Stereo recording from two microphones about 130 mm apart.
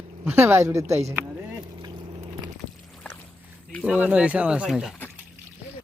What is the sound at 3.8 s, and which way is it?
Speech, 10° right (ahead or behind).